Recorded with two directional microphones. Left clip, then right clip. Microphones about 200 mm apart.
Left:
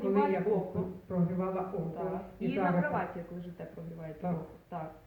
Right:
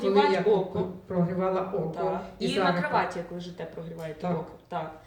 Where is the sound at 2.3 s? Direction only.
25° right (ahead or behind).